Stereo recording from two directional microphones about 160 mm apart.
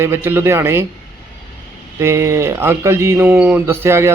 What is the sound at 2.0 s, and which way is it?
Speech, 15° right (ahead or behind).